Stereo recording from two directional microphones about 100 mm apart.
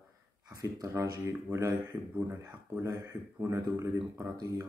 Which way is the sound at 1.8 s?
15° right (ahead or behind).